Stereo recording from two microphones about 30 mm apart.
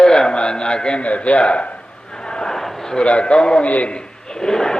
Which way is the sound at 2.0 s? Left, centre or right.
Left.